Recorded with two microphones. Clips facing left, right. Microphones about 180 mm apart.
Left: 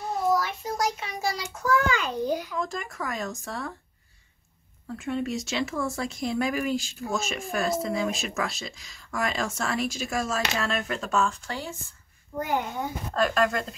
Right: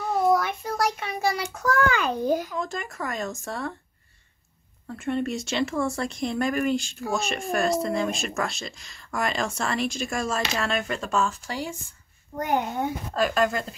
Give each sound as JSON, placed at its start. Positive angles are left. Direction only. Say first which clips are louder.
{"t": 0.3, "sound": "child singing", "louder": "right 3 dB", "side_deg": -55}
{"t": 2.5, "sound": "speech", "louder": "right 1 dB", "side_deg": 0}
{"t": 4.9, "sound": "speech", "louder": "right 2 dB", "side_deg": 0}
{"t": 13.1, "sound": "speech", "louder": "even", "side_deg": -5}